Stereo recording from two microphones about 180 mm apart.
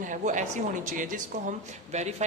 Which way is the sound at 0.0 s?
45° right (ahead or behind).